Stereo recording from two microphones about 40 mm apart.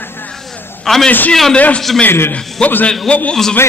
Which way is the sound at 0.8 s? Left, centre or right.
Centre.